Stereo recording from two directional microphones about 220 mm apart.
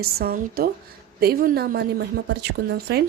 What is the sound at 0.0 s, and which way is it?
A woman's voice, 45° right (ahead or behind).